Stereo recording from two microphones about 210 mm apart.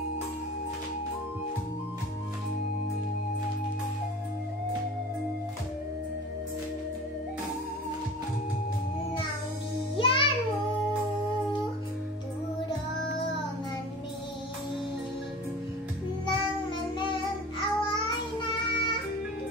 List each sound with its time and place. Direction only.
9.9 s music: 25° left (ahead or behind)
16.3 s child singing: 25° left (ahead or behind)